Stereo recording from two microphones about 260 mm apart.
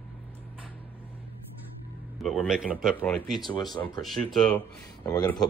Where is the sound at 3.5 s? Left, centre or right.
Centre.